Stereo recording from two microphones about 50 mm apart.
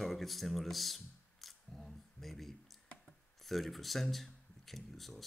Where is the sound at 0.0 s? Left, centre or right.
Centre.